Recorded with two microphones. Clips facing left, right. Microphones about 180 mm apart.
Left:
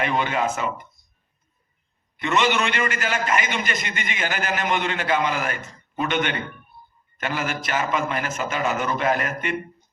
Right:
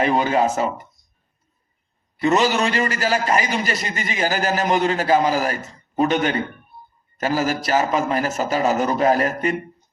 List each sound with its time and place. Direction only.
0.0 s a man's voice: 35° right (ahead or behind)
2.2 s a man's voice: 35° right (ahead or behind)